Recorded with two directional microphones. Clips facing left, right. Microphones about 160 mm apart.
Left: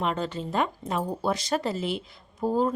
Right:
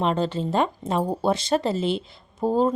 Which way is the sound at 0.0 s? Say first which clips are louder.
Right 5 dB; 30° right (ahead or behind).